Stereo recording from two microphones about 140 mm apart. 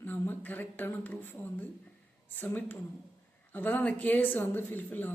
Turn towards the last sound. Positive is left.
turn(degrees=15)  # may be behind; listen again after turning